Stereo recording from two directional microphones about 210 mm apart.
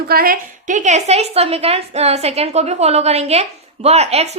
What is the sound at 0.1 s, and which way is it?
A woman's voice, 45° right (ahead or behind).